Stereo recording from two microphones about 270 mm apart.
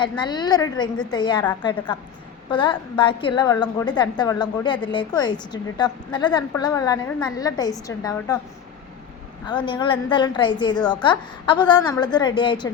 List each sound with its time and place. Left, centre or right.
0.0 s a woman's voice: centre
9.5 s a woman's voice: centre